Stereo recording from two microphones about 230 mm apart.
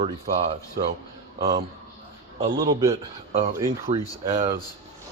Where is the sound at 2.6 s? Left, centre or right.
Centre.